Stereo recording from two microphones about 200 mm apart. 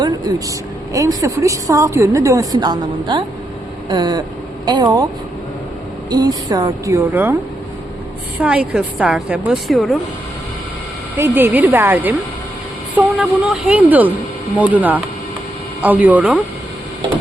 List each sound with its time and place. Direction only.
0.0 s vehicle: 20° right (ahead or behind)
0.9 s a woman's voice: 15° right (ahead or behind)
6.1 s a woman's voice: 20° right (ahead or behind)
8.4 s a woman's voice: 5° right (ahead or behind)
11.2 s a woman's voice: 10° right (ahead or behind)